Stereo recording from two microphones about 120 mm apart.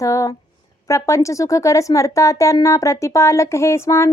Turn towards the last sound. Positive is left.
turn(degrees=25)  # may be behind; listen again after turning